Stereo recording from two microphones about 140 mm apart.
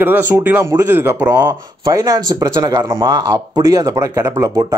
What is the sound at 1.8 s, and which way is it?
Speech, 25° right (ahead or behind).